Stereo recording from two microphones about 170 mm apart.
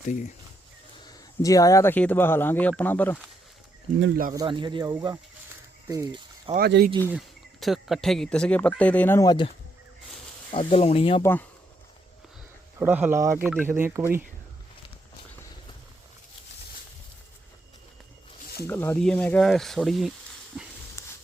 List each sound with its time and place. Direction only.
1.0 s speech: 20° left (ahead or behind)
4.4 s speech: 25° right (ahead or behind)
6.6 s speech: 80° right
7.1 s speech: centre (ahead or behind); by 9.5 s 25° left (ahead or behind)
10.5 s speech: 35° left (ahead or behind)
11.2 s speech: 10° left (ahead or behind)
12.8 s speech: 10° right (ahead or behind)
18.6 s speech: 15° left (ahead or behind)
20.5 s dog: centre (ahead or behind)
21.0 s a sound: 15° left (ahead or behind)